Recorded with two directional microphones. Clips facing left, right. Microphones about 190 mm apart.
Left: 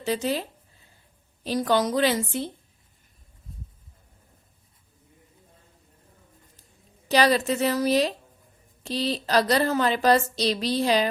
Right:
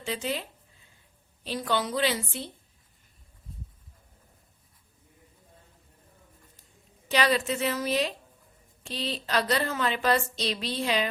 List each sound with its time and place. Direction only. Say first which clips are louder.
0.0 s a woman's voice: left 6 dB; 40° left (ahead or behind)
1.5 s a woman's voice: left 6 dB; 40° left (ahead or behind)
7.1 s a woman's voice: left 5 dB; 40° left (ahead or behind)